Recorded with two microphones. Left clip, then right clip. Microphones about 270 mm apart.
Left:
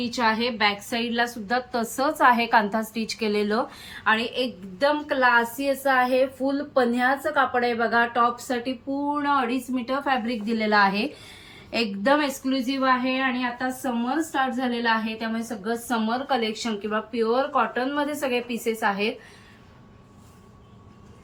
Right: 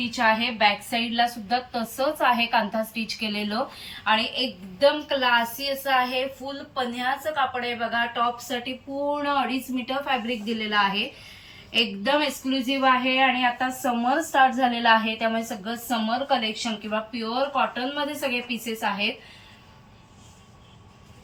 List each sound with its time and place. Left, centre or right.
0.1 s a woman's voice: centre
13.6 s a woman's voice: centre
15.6 s a woman's voice: centre